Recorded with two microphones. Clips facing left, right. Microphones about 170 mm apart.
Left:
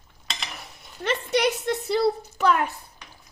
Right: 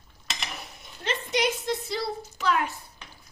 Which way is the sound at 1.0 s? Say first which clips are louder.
Left 4 dB; 65° left (ahead or behind).